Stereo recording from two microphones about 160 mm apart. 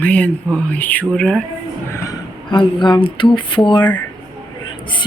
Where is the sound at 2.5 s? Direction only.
30° left (ahead or behind).